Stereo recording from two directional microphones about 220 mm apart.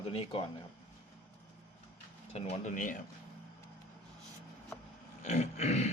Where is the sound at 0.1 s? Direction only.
25° left (ahead or behind).